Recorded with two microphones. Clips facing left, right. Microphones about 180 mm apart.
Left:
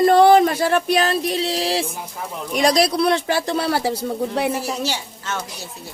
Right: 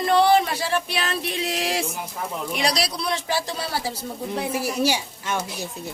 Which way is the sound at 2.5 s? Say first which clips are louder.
Left 10 dB; 45° left (ahead or behind).